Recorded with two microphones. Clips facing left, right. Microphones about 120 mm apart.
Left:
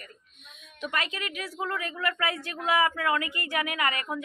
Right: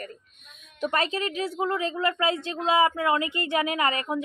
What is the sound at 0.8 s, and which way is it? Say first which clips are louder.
A woman's voice: right 6 dB; 35° right (ahead or behind).